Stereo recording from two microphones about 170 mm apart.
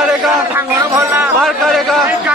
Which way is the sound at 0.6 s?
10° right (ahead or behind).